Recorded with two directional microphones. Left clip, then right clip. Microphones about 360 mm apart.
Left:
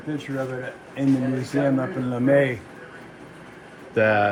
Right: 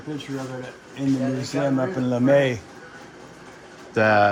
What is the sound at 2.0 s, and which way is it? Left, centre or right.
Speech, centre.